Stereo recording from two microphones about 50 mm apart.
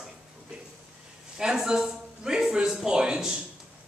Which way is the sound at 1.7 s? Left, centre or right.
Centre.